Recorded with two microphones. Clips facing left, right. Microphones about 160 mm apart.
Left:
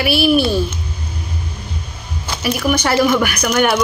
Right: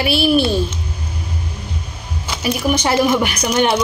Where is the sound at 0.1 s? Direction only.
10° left (ahead or behind).